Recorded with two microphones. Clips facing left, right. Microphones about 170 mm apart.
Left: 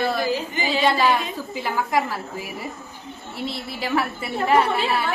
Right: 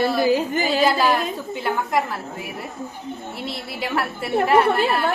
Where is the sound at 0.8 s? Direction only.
Centre (ahead or behind).